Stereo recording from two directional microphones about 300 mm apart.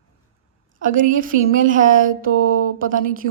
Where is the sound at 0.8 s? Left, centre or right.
Right.